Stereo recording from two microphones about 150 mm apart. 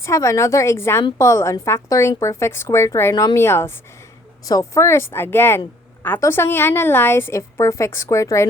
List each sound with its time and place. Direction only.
0.0 s a woman's voice: 20° left (ahead or behind)